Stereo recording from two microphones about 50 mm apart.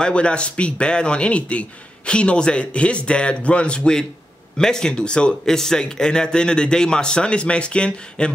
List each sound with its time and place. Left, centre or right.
0.0 s a man's voice: left
5.4 s a man's voice: centre